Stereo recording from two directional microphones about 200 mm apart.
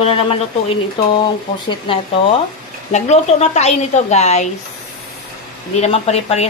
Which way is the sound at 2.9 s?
35° left (ahead or behind).